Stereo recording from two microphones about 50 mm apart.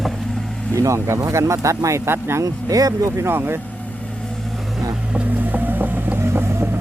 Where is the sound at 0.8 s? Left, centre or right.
Right.